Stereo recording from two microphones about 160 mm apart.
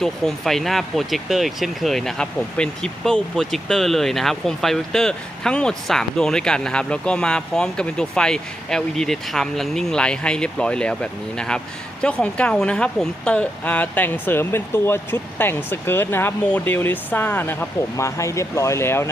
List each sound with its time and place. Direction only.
0.0 s speech: centre (ahead or behind)